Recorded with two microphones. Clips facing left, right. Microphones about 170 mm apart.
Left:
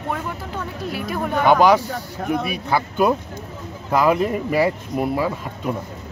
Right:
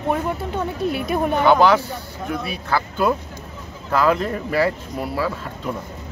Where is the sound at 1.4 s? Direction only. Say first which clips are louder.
Left 1 dB; 15° left (ahead or behind).